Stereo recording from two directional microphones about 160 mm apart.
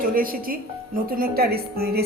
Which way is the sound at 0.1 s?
65° right (ahead or behind).